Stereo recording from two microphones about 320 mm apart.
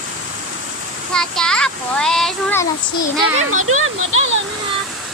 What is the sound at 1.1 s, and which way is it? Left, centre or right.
Child singing, centre.